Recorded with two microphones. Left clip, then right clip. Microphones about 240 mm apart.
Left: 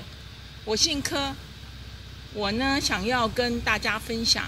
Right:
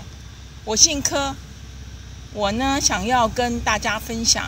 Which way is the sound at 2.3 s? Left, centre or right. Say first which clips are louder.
Right 5 dB; right.